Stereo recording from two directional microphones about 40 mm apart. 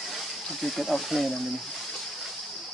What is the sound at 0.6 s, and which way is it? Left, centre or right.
Speech, centre.